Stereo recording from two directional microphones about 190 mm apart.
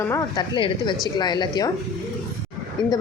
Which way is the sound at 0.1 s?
20° left (ahead or behind).